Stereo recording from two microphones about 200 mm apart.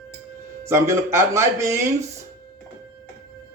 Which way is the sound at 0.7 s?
15° right (ahead or behind).